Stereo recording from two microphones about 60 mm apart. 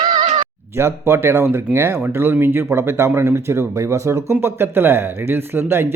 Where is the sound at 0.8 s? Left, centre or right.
Right.